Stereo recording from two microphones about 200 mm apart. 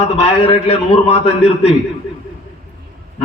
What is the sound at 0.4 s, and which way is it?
A man's voice, 30° left (ahead or behind).